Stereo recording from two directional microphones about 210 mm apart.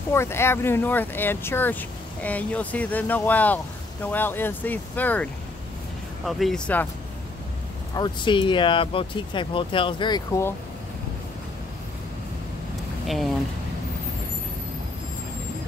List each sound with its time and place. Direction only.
0.1 s speech: 10° left (ahead or behind)
7.9 s speech: 20° left (ahead or behind)
13.0 s speech: centre (ahead or behind)